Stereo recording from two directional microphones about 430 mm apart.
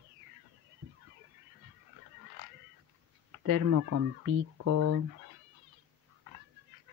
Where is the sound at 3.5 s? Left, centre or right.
Right.